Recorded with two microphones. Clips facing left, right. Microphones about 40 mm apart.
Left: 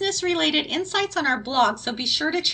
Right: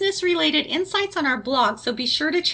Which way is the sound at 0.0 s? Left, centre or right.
Centre.